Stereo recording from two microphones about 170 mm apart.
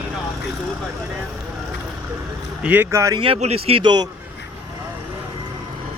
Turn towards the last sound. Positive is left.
turn(degrees=-25)  # may be behind; listen again after turning